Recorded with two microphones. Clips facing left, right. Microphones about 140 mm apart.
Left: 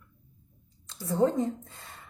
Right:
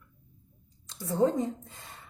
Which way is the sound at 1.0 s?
15° right (ahead or behind).